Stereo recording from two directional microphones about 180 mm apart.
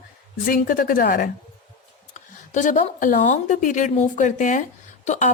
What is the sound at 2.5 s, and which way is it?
A woman's voice, 45° left (ahead or behind).